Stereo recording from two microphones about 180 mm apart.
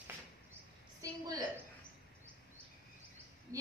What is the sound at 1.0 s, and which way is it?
Speech, 20° right (ahead or behind).